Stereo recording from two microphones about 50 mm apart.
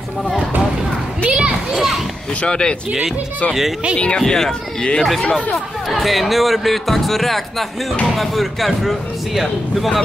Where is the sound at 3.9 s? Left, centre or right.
Left.